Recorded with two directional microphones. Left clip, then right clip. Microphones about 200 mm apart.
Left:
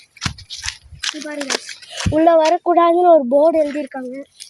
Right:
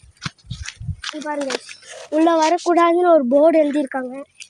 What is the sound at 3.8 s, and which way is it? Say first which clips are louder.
Speech: right 3 dB; 45° right (ahead or behind).